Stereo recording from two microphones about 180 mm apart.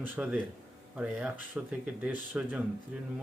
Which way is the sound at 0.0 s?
5° right (ahead or behind).